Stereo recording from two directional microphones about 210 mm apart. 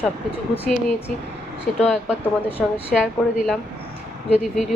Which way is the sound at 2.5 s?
25° left (ahead or behind).